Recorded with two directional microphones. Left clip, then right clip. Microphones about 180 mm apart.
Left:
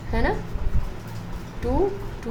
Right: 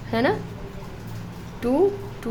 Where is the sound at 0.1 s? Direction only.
30° right (ahead or behind).